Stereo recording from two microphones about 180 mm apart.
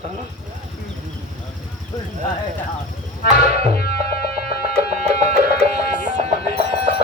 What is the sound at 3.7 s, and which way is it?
Music, 60° left (ahead or behind).